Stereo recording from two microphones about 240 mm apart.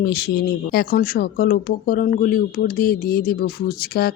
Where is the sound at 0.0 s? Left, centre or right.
Left.